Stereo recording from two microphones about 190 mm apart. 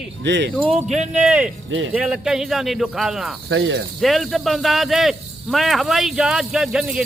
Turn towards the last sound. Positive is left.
turn(degrees=-5)  # may be behind; listen again after turning